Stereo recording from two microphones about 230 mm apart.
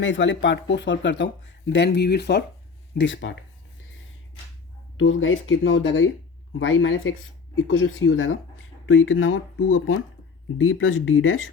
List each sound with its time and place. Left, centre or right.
0.0 s speech: left
4.9 s speech: left